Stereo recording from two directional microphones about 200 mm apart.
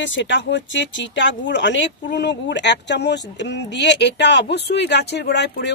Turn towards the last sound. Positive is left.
turn(degrees=55)  # may be behind; listen again after turning